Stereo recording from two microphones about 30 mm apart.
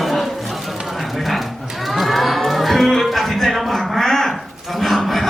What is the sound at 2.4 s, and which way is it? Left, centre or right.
Music, centre.